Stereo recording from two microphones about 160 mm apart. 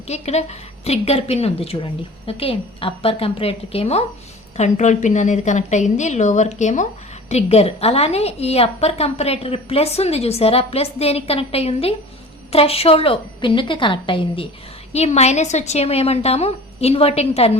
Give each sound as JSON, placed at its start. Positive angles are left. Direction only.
{"t": 0.1, "sound": "a woman's voice", "side_deg": 45}
{"t": 14.9, "sound": "a woman's voice", "side_deg": 45}